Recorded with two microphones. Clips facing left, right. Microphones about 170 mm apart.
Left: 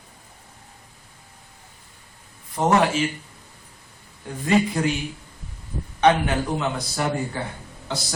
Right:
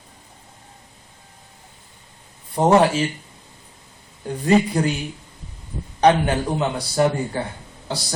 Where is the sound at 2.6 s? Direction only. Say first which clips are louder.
Right 4 dB; 30° right (ahead or behind).